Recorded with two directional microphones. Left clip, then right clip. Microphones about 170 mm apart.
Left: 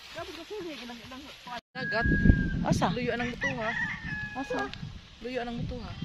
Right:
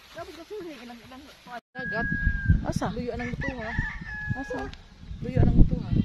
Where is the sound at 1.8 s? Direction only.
10° left (ahead or behind).